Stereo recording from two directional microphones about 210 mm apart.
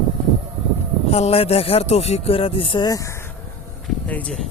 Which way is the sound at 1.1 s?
30° left (ahead or behind).